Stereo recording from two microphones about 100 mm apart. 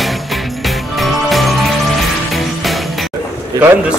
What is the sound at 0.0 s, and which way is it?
Music, centre (ahead or behind).